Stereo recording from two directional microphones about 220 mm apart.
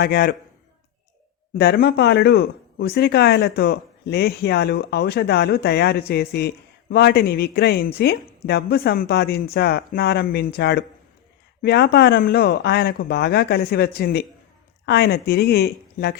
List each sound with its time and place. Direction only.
0.0 s speech: 45° left (ahead or behind)
1.5 s speech: 45° left (ahead or behind)